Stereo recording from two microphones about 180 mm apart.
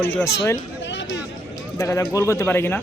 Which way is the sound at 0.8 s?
90° left.